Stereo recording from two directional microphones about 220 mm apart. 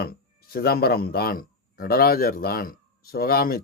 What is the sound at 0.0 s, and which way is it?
Speech, 45° left (ahead or behind).